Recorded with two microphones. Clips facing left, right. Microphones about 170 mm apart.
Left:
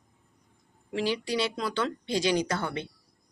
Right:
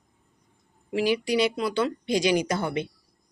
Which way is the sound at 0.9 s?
10° right (ahead or behind).